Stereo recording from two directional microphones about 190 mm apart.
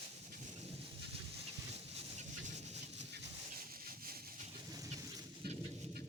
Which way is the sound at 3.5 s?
50° right (ahead or behind).